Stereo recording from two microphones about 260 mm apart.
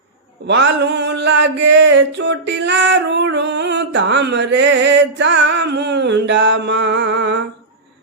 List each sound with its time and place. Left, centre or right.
0.4 s mantra: right